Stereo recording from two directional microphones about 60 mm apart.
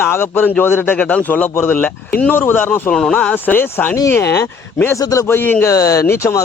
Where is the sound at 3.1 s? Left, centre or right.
Centre.